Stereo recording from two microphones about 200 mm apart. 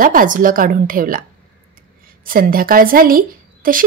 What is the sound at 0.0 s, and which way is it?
A woman's voice, 45° right (ahead or behind).